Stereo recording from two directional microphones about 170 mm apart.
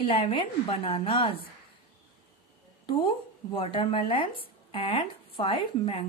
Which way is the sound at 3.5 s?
30° left (ahead or behind).